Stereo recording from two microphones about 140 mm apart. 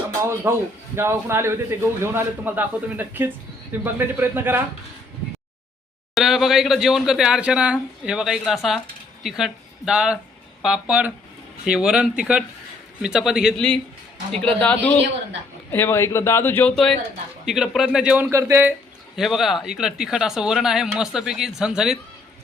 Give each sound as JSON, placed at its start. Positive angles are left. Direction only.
{"t": 0.2, "sound": "a man's voice", "side_deg": -20}
{"t": 6.1, "sound": "a man's voice", "side_deg": 0}
{"t": 14.3, "sound": "speech", "side_deg": 10}
{"t": 17.4, "sound": "speech", "side_deg": -5}
{"t": 18.3, "sound": "a man's voice", "side_deg": -20}
{"t": 19.1, "sound": "speech", "side_deg": 0}